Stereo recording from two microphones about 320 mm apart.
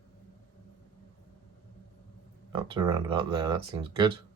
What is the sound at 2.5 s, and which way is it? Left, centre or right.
Speech, centre.